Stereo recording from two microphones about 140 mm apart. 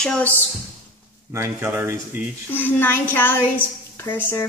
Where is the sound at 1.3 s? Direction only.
20° right (ahead or behind).